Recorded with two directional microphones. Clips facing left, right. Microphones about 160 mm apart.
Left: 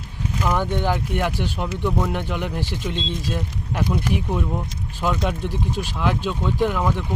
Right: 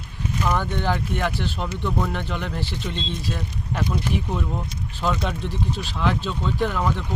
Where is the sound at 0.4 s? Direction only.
15° left (ahead or behind).